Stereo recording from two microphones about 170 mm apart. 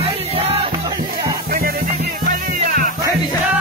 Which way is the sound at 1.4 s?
60° right (ahead or behind).